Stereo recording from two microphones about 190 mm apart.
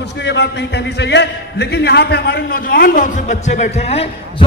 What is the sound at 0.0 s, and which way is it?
A man's voice, 65° left (ahead or behind).